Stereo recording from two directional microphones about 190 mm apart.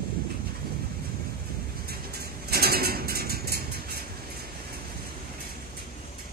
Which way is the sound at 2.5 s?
55° right (ahead or behind).